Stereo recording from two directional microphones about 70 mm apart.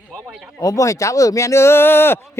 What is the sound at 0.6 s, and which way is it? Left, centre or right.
Speech, left.